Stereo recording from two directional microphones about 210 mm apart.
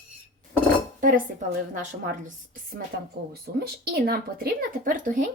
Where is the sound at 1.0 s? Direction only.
40° right (ahead or behind).